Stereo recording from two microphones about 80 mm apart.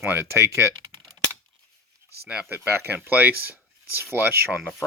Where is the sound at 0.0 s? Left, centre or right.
Right.